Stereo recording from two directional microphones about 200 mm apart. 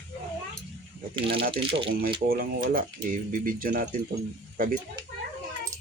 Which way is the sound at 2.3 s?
45° right (ahead or behind).